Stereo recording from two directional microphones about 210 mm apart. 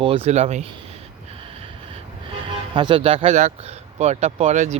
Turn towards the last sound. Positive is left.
turn(degrees=-35)  # may be behind; listen again after turning